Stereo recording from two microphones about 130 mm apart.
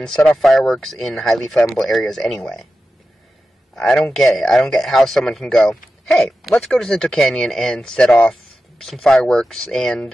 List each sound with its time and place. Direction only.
0.0 s speech: 5° left (ahead or behind)
3.7 s speech: 5° left (ahead or behind)